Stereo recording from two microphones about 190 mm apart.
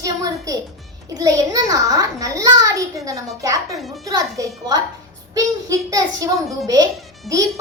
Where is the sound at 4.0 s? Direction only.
20° right (ahead or behind).